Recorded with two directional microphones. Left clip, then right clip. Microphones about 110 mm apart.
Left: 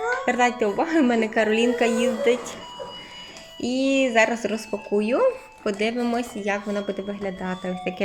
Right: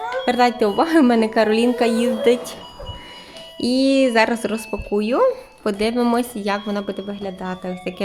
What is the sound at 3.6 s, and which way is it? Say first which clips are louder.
Speech: right 5 dB; 60° right (ahead or behind).